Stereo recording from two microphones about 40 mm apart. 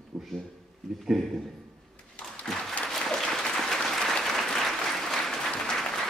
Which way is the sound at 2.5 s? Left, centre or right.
Centre.